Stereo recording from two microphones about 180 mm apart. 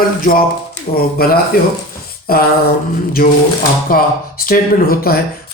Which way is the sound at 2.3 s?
55° left (ahead or behind).